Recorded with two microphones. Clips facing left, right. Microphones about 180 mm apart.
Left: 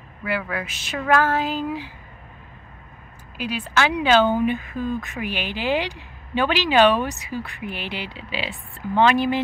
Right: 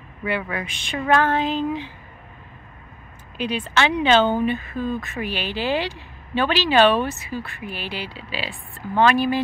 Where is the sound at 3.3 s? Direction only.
5° left (ahead or behind).